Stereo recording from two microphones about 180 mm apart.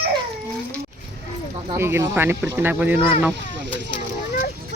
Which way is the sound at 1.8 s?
15° right (ahead or behind).